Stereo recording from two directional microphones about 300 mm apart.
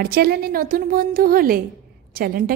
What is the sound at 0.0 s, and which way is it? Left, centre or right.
A woman's voice, right.